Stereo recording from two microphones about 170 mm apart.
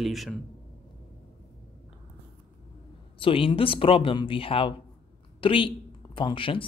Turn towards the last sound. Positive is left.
turn(degrees=30)  # may be behind; listen again after turning